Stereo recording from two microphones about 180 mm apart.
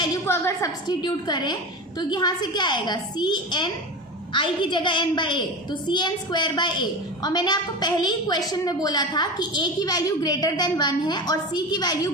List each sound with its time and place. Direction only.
0.0 s a woman's voice: 15° left (ahead or behind)